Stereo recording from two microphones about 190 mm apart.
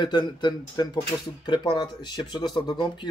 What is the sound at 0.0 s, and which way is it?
Speech, 25° left (ahead or behind).